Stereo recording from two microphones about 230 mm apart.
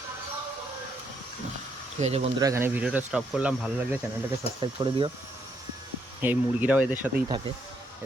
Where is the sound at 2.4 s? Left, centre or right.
Centre.